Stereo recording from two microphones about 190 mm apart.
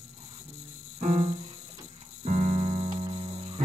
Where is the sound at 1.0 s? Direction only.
35° right (ahead or behind).